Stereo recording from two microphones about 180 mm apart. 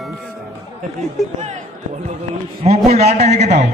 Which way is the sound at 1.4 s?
40° right (ahead or behind).